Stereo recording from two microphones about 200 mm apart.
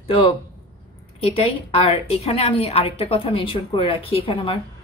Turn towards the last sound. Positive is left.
turn(degrees=25)  # may be behind; listen again after turning